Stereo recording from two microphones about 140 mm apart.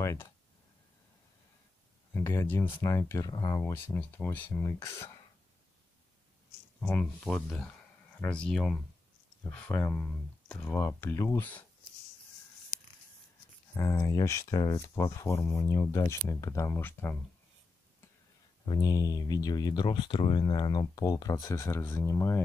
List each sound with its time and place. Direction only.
0.0 s speech: 20° left (ahead or behind)
2.1 s speech: 15° left (ahead or behind)
3.8 s speech: 10° left (ahead or behind)
4.5 s speech: 20° left (ahead or behind)
6.8 s speech: 10° left (ahead or behind)
13.7 s speech: 20° left (ahead or behind)
18.7 s speech: 30° left (ahead or behind)